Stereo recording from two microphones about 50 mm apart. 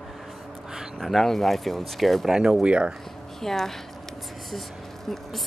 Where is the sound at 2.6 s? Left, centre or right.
Right.